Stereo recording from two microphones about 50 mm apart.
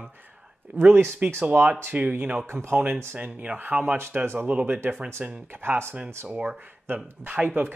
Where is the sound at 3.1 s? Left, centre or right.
Right.